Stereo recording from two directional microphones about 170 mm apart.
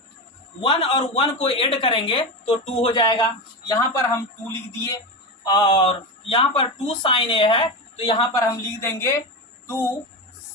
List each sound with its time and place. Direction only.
0.6 s speech: 35° left (ahead or behind)
3.7 s a woman's voice: 20° left (ahead or behind)
5.5 s speech: 25° left (ahead or behind)
8.4 s a woman's voice: 15° left (ahead or behind)